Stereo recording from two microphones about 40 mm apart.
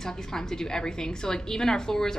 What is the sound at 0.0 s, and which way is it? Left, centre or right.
A woman's voice, centre.